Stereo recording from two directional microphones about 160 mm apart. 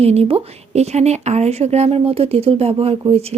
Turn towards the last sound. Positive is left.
turn(degrees=-40)  # may be behind; listen again after turning